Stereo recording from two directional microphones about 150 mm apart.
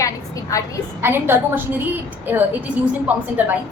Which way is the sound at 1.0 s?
15° right (ahead or behind).